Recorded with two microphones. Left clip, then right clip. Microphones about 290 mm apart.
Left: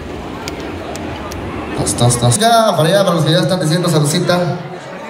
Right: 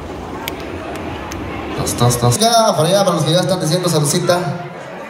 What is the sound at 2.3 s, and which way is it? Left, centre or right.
A man's voice, right.